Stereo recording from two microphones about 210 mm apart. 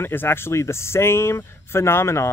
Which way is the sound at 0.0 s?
10° left (ahead or behind).